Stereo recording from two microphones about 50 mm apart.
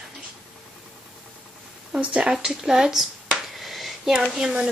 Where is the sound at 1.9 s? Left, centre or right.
Right.